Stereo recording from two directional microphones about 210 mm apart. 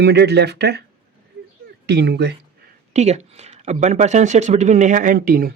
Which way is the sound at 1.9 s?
55° right (ahead or behind).